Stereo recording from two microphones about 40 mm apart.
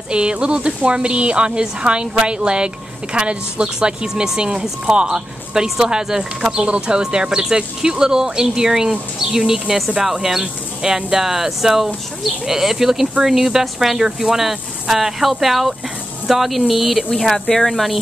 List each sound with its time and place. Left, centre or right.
0.1 s a woman's voice: right; by 17.9 s centre